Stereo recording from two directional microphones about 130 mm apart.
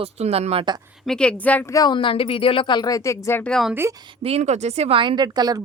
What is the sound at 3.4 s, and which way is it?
Speech, 5° left (ahead or behind).